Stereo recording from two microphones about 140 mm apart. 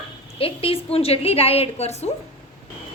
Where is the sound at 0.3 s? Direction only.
40° left (ahead or behind).